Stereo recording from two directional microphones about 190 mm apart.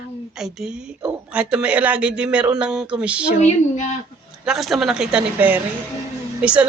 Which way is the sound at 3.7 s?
40° left (ahead or behind).